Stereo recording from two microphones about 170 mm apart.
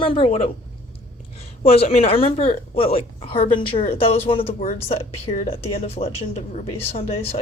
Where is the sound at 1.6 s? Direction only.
35° left (ahead or behind).